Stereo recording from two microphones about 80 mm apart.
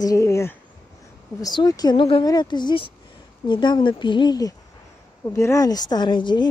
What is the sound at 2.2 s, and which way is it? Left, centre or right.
Speech, left.